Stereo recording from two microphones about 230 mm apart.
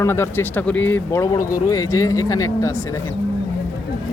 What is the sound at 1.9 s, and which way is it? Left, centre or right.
Speech, centre.